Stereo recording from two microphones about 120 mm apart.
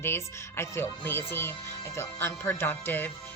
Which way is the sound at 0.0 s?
20° left (ahead or behind).